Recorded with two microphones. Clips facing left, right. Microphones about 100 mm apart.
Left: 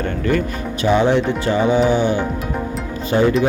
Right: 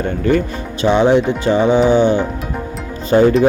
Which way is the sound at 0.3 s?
25° right (ahead or behind).